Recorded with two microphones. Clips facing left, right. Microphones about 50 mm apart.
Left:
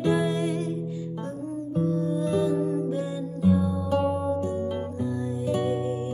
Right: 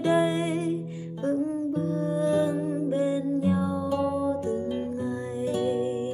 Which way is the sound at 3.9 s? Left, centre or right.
Left.